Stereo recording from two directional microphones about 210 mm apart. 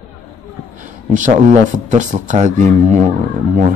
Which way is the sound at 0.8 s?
35° right (ahead or behind).